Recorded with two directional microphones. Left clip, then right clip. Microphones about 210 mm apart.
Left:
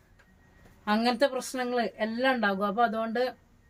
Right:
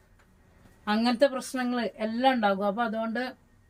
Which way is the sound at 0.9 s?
15° left (ahead or behind).